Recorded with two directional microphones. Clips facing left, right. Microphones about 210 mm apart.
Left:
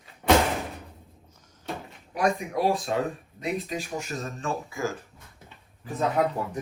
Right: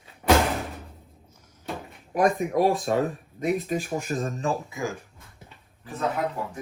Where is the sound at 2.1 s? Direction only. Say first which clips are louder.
Right 4 dB; 50° right (ahead or behind).